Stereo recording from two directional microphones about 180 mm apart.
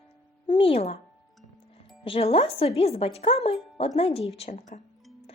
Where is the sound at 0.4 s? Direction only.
30° left (ahead or behind).